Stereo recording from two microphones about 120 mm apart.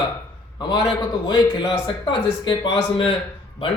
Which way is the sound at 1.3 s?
35° left (ahead or behind).